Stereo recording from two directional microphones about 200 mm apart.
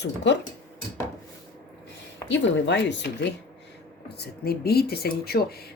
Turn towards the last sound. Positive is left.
turn(degrees=50)  # may be behind; listen again after turning